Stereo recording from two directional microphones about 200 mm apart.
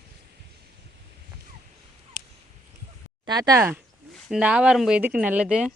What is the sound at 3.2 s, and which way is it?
Speech, 20° right (ahead or behind).